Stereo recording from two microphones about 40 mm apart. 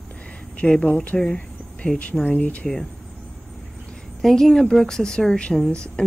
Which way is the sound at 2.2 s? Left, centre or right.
Left.